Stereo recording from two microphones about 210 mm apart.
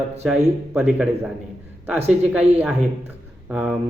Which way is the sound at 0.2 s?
Centre (ahead or behind).